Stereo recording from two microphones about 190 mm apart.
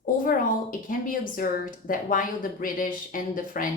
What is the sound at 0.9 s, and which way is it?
Speech, 45° left (ahead or behind).